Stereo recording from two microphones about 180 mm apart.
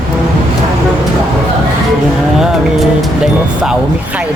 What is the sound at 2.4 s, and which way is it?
Music, centre (ahead or behind).